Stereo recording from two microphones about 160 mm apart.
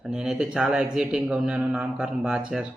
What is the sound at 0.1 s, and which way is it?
A man's voice, 5° right (ahead or behind).